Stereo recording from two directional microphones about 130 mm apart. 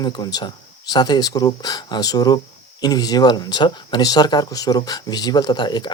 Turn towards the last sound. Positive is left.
turn(degrees=35)  # may be behind; listen again after turning